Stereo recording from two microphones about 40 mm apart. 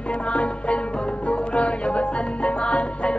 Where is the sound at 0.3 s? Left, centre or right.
Left.